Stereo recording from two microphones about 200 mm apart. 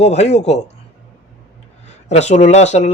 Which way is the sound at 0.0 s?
30° left (ahead or behind).